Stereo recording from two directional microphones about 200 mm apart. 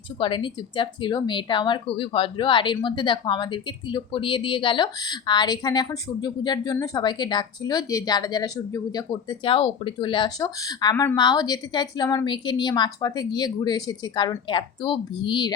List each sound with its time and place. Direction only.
0.2 s speech: 25° left (ahead or behind)